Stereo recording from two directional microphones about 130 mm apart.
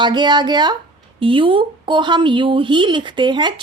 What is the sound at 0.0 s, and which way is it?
A woman's voice, 35° right (ahead or behind).